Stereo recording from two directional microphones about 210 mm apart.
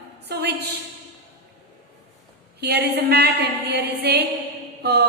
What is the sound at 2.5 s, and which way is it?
A woman's voice, 50° right (ahead or behind).